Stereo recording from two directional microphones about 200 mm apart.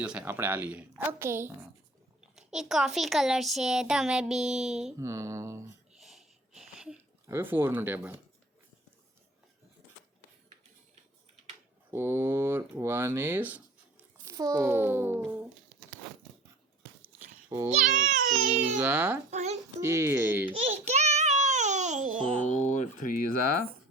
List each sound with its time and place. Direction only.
0.0 s speech: 5° right (ahead or behind)
4.9 s speech: 15° right (ahead or behind)
6.0 s a sound: centre (ahead or behind)
11.9 s speech: 10° right (ahead or behind)
17.7 s speech: 45° right (ahead or behind)
18.8 s speech: 10° right (ahead or behind)
19.3 s a child's voice: 35° right (ahead or behind)
19.8 s speech: 15° right (ahead or behind)
20.5 s child singing: 30° right (ahead or behind)
22.6 s speech: 35° left (ahead or behind)